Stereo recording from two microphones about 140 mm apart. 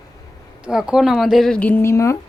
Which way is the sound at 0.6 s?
5° right (ahead or behind).